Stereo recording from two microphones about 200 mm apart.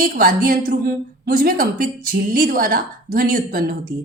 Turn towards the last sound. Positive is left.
turn(degrees=-45)  # may be behind; listen again after turning